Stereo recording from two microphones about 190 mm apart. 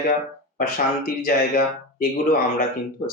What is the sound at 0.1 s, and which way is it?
Speech, 45° left (ahead or behind).